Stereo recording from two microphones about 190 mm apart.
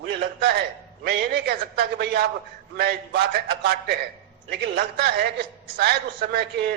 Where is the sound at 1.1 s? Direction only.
60° right (ahead or behind).